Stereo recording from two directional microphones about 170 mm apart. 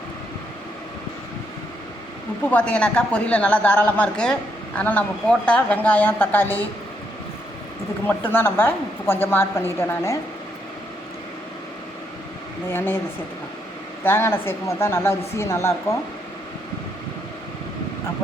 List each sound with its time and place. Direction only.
2.4 s speech: 10° left (ahead or behind)
8.0 s speech: 10° left (ahead or behind)
12.6 s speech: 10° left (ahead or behind)
14.0 s speech: 15° left (ahead or behind)